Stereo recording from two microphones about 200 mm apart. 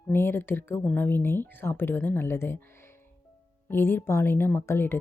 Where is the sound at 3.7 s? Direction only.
10° left (ahead or behind).